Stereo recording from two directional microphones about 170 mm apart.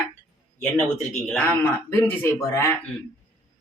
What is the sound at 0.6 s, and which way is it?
Speech, centre (ahead or behind).